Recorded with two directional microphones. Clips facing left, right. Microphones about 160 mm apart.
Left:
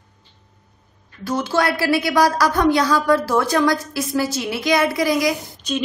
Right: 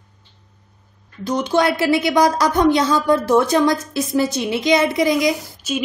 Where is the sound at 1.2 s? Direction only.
20° right (ahead or behind).